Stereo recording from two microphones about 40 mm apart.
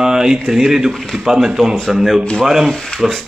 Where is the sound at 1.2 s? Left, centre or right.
Centre.